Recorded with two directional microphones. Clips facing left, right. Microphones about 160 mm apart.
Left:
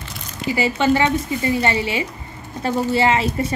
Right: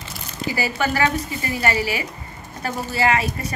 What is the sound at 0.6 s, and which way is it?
A woman's voice, 25° left (ahead or behind).